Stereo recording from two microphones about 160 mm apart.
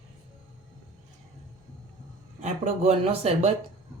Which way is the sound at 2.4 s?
45° right (ahead or behind).